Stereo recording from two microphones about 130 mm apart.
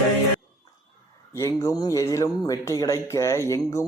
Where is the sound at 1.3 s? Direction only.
25° left (ahead or behind).